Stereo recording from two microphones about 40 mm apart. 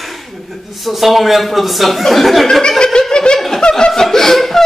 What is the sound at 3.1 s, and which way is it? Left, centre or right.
Snicker, left.